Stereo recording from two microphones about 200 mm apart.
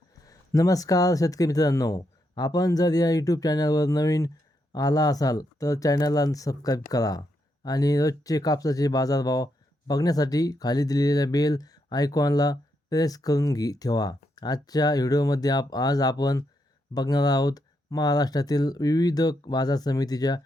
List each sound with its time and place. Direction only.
0.3 s speech: 15° left (ahead or behind)